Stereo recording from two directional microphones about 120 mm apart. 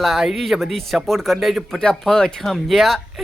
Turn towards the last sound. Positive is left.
turn(degrees=0)  # may be behind; listen again after turning